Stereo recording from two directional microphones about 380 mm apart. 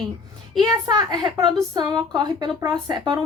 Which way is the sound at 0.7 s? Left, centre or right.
Centre.